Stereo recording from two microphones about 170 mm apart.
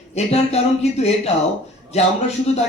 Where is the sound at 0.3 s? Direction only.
40° left (ahead or behind).